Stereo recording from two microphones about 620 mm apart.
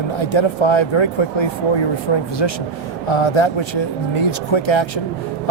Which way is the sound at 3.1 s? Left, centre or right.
Left.